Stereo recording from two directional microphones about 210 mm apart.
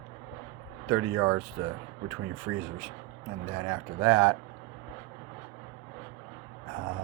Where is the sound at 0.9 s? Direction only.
10° right (ahead or behind).